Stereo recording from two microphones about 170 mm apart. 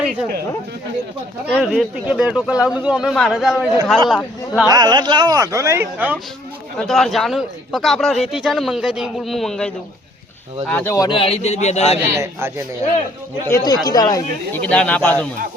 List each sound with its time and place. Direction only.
0.0 s a sound: 10° right (ahead or behind)
1.5 s a man's voice: 5° right (ahead or behind)
4.7 s speech: 25° right (ahead or behind)
6.7 s a man's voice: 5° left (ahead or behind)
10.9 s a man's voice: 25° left (ahead or behind)
12.1 s a man's voice: 15° right (ahead or behind)
13.5 s speech: 25° left (ahead or behind)
14.5 s speech: 5° left (ahead or behind)